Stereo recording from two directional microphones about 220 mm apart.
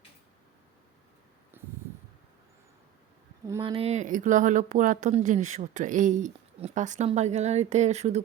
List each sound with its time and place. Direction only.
3.4 s speech: 15° right (ahead or behind)
3.7 s speech: 25° right (ahead or behind)